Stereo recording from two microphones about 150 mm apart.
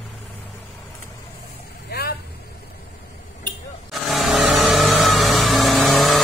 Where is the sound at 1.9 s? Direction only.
90° left.